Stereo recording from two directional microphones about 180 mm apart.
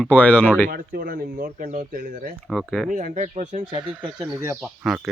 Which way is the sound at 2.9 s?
45° right (ahead or behind).